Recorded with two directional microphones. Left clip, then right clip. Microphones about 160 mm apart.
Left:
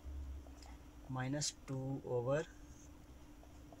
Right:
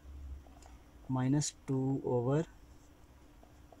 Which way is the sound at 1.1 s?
40° right (ahead or behind).